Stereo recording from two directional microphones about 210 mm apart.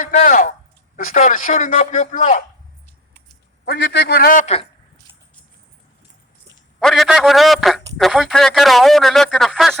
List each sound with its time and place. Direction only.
0.0 s speech: 35° left (ahead or behind)
3.7 s a man's voice: 55° left (ahead or behind); by 4.7 s 30° left (ahead or behind)
6.7 s a man's voice: centre (ahead or behind)